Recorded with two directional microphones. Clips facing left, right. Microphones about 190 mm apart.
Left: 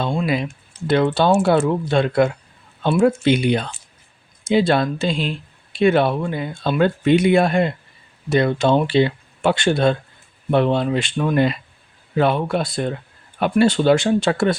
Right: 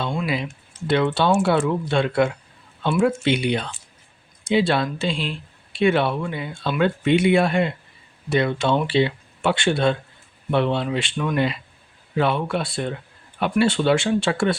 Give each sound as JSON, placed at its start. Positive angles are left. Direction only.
{"t": 0.0, "sound": "speech", "side_deg": 30}